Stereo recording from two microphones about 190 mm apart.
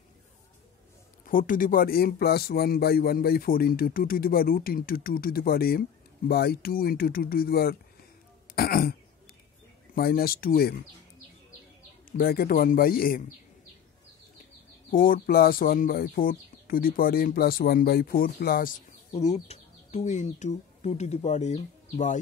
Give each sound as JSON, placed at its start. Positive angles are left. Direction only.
{"t": 1.2, "sound": "speech", "side_deg": 45}
{"t": 9.9, "sound": "speech", "side_deg": 55}
{"t": 12.2, "sound": "speech", "side_deg": 50}
{"t": 14.9, "sound": "speech", "side_deg": 45}